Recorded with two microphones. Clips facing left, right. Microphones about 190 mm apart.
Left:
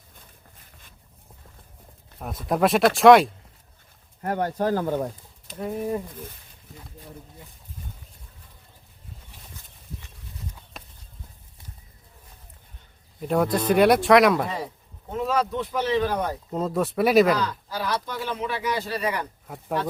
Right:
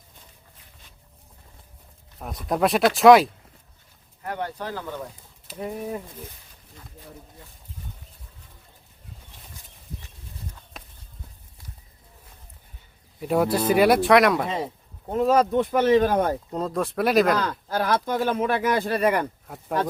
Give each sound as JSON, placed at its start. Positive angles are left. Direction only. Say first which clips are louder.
{"t": 2.1, "sound": "speech", "louder": "left 1 dB", "side_deg": 0}
{"t": 4.2, "sound": "speech", "louder": "left 6 dB", "side_deg": 45}
{"t": 5.5, "sound": "speech", "louder": "left 2 dB", "side_deg": -5}
{"t": 10.8, "sound": "horse", "louder": "even", "side_deg": 0}
{"t": 13.1, "sound": "speech", "louder": "right 1 dB", "side_deg": -5}
{"t": 14.4, "sound": "speech", "louder": "right 3 dB", "side_deg": -20}
{"t": 15.1, "sound": "speech", "louder": "right 6 dB", "side_deg": -45}
{"t": 16.5, "sound": "speech", "louder": "left 1 dB", "side_deg": 5}
{"t": 17.3, "sound": "speech", "louder": "right 2 dB", "side_deg": -50}